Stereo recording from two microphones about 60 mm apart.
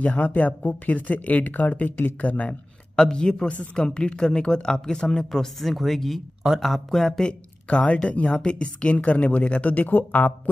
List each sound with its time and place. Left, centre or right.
0.0 s speech: left
3.0 s a woman's voice: centre
7.6 s speech: left